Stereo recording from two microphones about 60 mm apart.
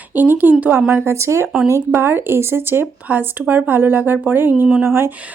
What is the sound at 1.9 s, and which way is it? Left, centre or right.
Speech, right.